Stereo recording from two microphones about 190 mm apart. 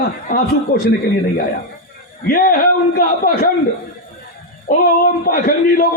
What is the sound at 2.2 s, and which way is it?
A man's voice, 50° left (ahead or behind).